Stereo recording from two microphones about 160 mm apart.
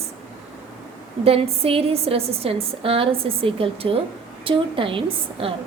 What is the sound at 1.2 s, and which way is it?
A woman's voice, 40° right (ahead or behind).